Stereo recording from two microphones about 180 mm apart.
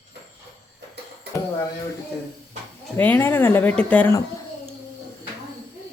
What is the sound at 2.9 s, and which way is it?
Speech, 10° left (ahead or behind).